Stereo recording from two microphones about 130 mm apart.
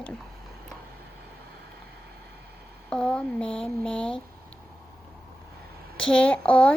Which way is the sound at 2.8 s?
10° left (ahead or behind).